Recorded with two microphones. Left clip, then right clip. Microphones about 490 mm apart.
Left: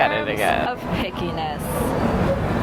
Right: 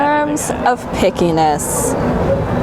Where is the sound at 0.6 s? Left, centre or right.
Right.